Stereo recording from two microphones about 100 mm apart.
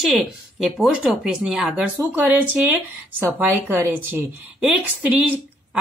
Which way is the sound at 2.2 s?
20° right (ahead or behind).